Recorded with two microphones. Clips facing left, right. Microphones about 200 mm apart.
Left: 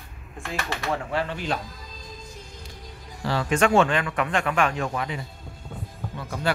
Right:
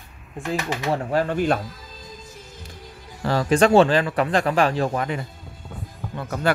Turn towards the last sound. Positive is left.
turn(degrees=-55)  # may be behind; listen again after turning